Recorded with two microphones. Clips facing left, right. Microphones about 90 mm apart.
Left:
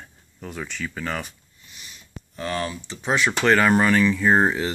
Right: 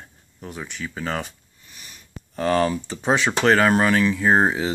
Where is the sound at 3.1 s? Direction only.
30° right (ahead or behind).